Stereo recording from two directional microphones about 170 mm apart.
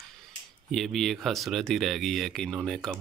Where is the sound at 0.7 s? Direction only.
Centre (ahead or behind).